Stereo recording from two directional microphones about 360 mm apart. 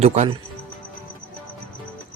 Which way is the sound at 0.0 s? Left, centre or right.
Centre.